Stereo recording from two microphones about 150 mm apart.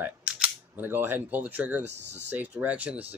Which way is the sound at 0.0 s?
10° right (ahead or behind).